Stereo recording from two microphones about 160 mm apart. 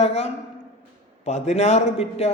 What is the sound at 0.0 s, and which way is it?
A man's voice, 40° left (ahead or behind).